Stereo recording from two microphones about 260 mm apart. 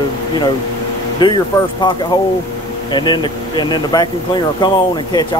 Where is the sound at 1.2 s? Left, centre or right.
Centre.